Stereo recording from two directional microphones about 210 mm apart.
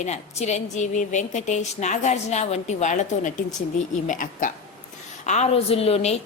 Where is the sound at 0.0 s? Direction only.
30° left (ahead or behind).